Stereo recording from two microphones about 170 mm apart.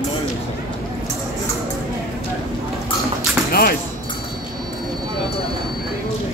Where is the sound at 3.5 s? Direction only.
60° left (ahead or behind).